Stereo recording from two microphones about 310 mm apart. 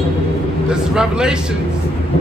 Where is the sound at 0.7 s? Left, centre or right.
Centre.